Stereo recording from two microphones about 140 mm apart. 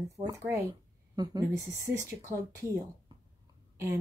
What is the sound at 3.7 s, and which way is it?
Whispering, 20° right (ahead or behind).